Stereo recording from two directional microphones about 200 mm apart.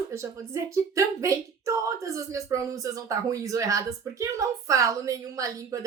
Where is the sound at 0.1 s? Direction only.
15° right (ahead or behind).